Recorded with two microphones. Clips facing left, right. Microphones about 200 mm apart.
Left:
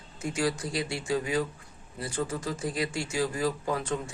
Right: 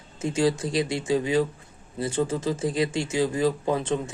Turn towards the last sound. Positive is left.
turn(degrees=-25)  # may be behind; listen again after turning